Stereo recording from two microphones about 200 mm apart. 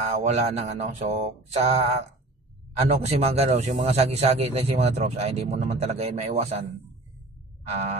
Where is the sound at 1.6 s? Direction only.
35° right (ahead or behind).